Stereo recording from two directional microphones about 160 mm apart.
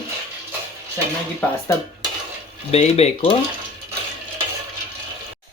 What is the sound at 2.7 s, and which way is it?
Speech, 40° left (ahead or behind).